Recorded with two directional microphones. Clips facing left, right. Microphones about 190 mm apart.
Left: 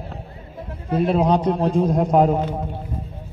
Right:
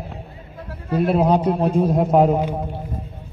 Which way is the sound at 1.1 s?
10° right (ahead or behind).